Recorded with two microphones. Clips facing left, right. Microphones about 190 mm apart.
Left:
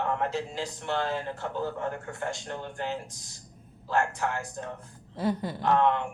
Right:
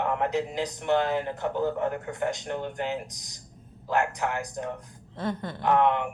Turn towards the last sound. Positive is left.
turn(degrees=-15)  # may be behind; listen again after turning